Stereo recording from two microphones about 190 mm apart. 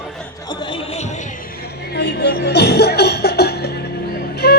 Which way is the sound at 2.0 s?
60° left (ahead or behind).